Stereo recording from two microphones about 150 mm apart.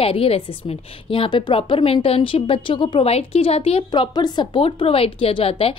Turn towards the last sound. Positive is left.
turn(degrees=40)  # may be behind; listen again after turning